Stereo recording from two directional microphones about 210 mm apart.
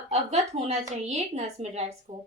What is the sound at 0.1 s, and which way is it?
A woman's voice, 30° right (ahead or behind).